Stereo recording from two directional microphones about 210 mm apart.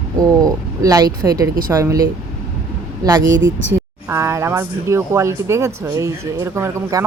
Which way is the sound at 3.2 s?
60° right (ahead or behind).